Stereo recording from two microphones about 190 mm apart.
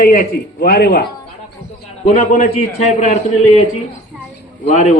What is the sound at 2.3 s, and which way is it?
A man's voice, 40° left (ahead or behind).